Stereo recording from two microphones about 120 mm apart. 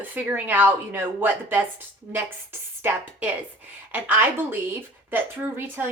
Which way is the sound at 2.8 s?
20° right (ahead or behind).